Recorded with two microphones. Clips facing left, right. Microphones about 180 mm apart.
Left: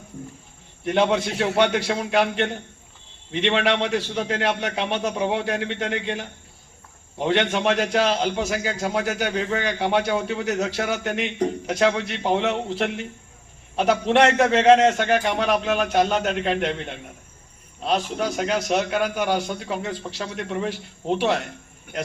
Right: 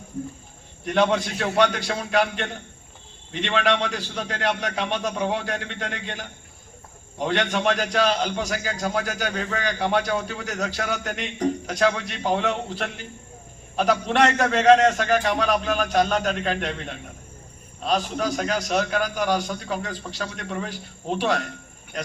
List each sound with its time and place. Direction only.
0.9 s a man's voice: 25° left (ahead or behind)